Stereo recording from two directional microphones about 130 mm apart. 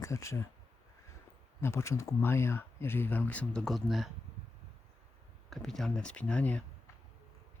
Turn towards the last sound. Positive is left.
turn(degrees=10)  # may be behind; listen again after turning